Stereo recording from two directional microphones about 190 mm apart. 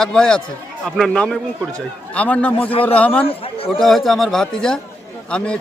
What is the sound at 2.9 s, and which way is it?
Speech, 5° left (ahead or behind).